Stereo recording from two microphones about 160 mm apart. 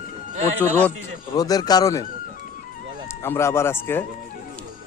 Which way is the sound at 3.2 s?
15° left (ahead or behind).